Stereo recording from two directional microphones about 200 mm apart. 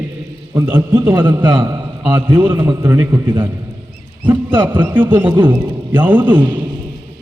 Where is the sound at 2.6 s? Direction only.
15° right (ahead or behind).